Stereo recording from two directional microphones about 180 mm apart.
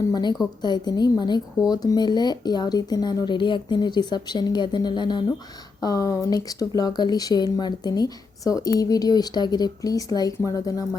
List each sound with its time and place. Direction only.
0.0 s speech: 20° left (ahead or behind)